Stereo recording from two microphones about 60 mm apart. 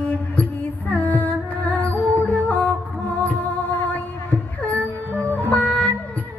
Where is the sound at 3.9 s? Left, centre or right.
Left.